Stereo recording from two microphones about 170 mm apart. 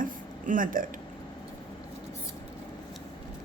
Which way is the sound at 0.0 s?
55° right (ahead or behind).